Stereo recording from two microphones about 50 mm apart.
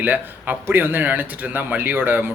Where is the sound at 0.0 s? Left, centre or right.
Right.